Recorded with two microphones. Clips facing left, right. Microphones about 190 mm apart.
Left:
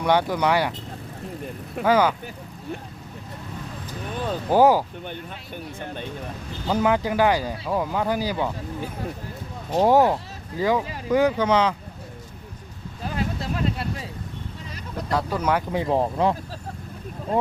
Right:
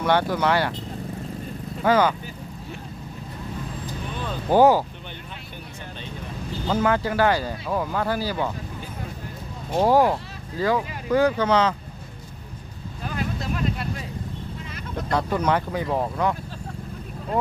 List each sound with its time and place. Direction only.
0.0 s speech: 15° left (ahead or behind)
1.8 s speech: 10° left (ahead or behind)
4.5 s speech: 10° left (ahead or behind)
6.7 s speech: 15° left (ahead or behind)
9.8 s speech: 20° left (ahead or behind)
13.1 s vehicle: 30° left (ahead or behind)
15.1 s speech: 10° left (ahead or behind)
15.7 s speech: 25° left (ahead or behind)